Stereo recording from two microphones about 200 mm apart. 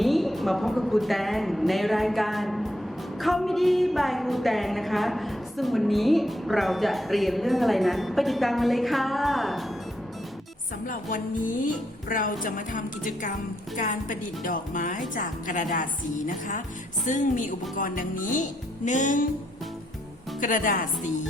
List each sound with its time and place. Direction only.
0.0 s a woman's voice: centre (ahead or behind)
10.8 s speech: 40° left (ahead or behind)
20.4 s speech: 40° left (ahead or behind)